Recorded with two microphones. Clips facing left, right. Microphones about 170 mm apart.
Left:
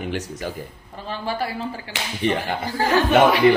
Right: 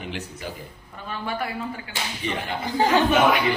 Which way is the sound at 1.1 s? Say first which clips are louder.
Left 3 dB; 30° left (ahead or behind).